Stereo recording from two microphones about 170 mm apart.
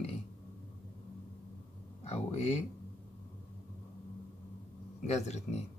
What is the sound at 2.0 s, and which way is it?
Speech, 40° left (ahead or behind).